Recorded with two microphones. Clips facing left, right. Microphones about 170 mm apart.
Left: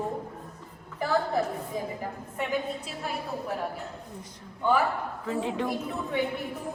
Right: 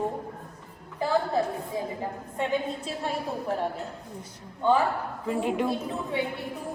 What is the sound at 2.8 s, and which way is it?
Speech, 30° right (ahead or behind).